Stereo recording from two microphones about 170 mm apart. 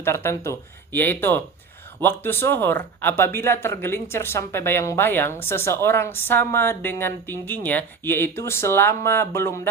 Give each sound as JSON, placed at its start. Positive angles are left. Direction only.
{"t": 0.0, "sound": "speech", "side_deg": 15}